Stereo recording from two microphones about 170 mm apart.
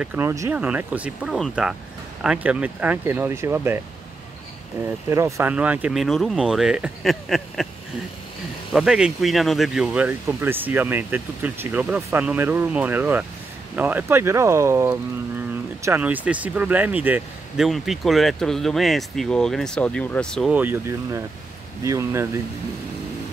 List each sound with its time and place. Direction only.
0.0 s speech: 10° right (ahead or behind)
5.1 s speech: 15° right (ahead or behind)
8.7 s speech: 5° right (ahead or behind)
20.5 s speech: 10° right (ahead or behind)